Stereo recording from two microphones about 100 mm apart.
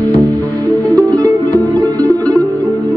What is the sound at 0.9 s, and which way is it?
Music, 40° right (ahead or behind).